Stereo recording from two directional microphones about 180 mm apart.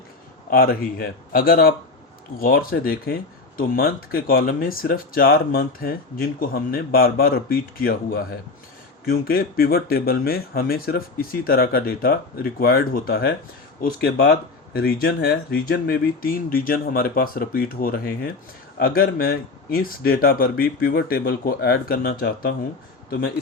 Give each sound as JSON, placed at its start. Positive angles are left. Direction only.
{"t": 0.5, "sound": "speech", "side_deg": 55}